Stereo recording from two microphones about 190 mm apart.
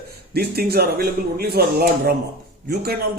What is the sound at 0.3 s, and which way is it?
Speech, 55° right (ahead or behind).